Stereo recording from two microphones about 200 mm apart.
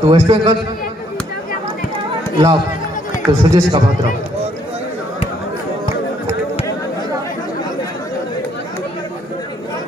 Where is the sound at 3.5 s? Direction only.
20° right (ahead or behind).